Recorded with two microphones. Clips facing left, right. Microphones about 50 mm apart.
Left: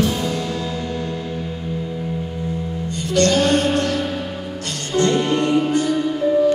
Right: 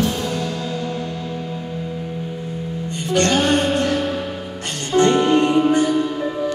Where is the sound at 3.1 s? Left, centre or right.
Right.